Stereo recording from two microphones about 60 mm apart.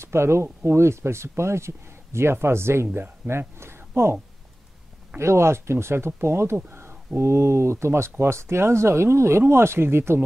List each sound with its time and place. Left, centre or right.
0.0 s speech: right
5.2 s speech: right